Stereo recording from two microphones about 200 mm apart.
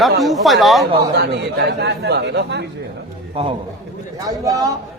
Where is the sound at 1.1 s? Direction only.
55° right (ahead or behind).